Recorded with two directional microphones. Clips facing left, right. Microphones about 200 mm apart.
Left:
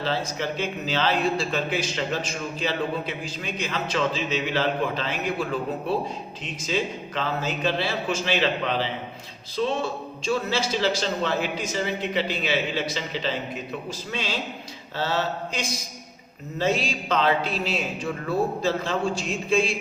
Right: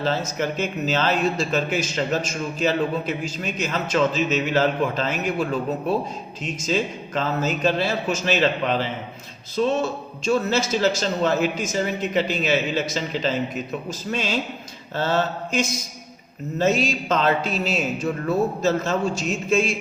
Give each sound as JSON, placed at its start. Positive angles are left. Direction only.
{"t": 0.0, "sound": "speech", "side_deg": -45}
{"t": 10.2, "sound": "speech", "side_deg": -45}
{"t": 14.9, "sound": "mantra", "side_deg": -50}
{"t": 16.6, "sound": "speech", "side_deg": -45}